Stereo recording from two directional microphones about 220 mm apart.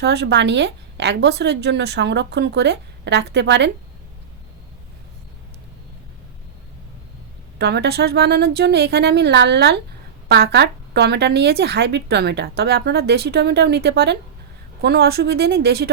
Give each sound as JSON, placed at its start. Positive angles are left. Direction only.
{"t": 0.0, "sound": "speech", "side_deg": -50}
{"t": 7.6, "sound": "speech", "side_deg": -50}